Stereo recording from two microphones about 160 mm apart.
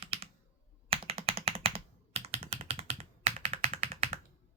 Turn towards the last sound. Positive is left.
turn(degrees=-35)  # may be behind; listen again after turning